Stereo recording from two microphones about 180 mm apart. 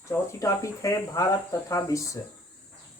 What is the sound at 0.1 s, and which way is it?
Speech, 15° left (ahead or behind).